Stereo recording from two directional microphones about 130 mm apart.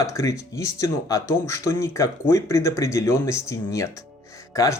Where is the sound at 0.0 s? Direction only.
25° left (ahead or behind).